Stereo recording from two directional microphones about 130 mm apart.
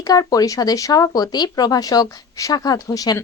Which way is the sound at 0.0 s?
30° left (ahead or behind).